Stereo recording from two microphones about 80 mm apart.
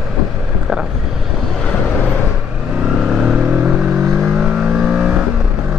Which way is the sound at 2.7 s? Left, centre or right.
Centre.